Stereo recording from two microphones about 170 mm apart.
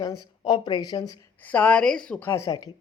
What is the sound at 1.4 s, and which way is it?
A woman's voice, 10° left (ahead or behind).